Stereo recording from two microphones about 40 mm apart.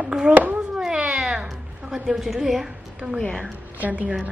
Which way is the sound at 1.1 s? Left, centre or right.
Centre.